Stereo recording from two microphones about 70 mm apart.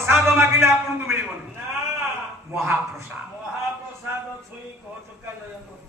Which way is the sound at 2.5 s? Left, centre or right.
Right.